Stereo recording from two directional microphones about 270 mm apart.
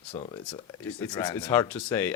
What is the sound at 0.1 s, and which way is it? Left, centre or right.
Speech, centre.